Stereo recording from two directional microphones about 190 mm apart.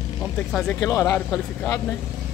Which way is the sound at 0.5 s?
5° left (ahead or behind).